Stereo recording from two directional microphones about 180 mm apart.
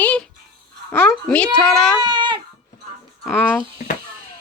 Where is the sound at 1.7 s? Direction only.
5° left (ahead or behind).